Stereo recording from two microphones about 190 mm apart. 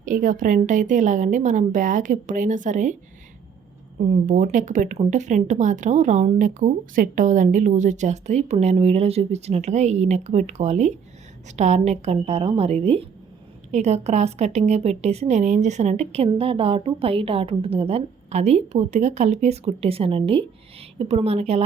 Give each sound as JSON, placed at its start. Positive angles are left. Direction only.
{"t": 0.0, "sound": "a woman's voice", "side_deg": -45}
{"t": 4.0, "sound": "a woman's voice", "side_deg": -45}